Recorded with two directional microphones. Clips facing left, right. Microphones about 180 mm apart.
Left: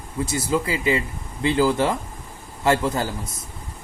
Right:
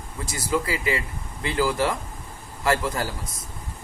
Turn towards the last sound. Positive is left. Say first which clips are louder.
# left 3 dB
turn(degrees=25)  # may be behind; listen again after turning